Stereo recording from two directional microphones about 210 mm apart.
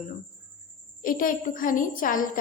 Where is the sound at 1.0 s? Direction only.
40° left (ahead or behind).